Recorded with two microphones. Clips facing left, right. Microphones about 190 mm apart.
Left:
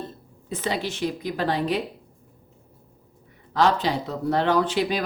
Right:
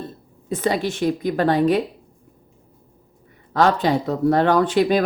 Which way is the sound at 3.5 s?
50° right (ahead or behind).